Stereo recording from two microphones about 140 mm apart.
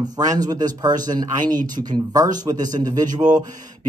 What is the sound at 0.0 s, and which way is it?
Speech, 25° right (ahead or behind).